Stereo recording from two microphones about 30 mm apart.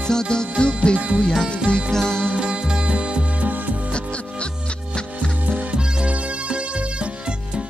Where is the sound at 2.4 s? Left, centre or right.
Right.